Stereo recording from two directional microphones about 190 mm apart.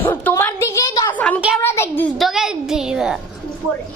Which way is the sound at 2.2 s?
Centre (ahead or behind).